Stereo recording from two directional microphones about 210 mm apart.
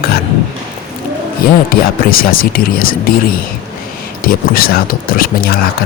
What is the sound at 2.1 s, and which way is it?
Speech, 45° left (ahead or behind).